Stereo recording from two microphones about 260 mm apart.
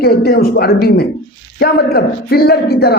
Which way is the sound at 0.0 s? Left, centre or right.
Left.